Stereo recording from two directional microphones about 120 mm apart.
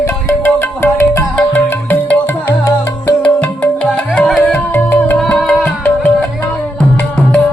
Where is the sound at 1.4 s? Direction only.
15° left (ahead or behind).